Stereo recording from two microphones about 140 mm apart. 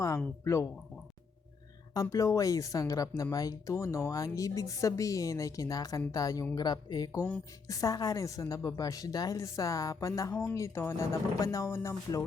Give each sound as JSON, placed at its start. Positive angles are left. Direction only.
{"t": 0.4, "sound": "a woman's voice", "side_deg": 20}
{"t": 1.9, "sound": "a woman's voice", "side_deg": 25}